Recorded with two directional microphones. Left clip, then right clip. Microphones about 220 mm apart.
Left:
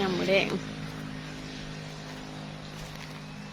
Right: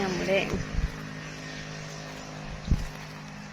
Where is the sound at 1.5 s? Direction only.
40° right (ahead or behind).